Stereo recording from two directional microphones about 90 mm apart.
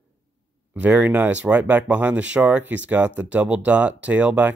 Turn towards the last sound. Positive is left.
turn(degrees=-15)  # may be behind; listen again after turning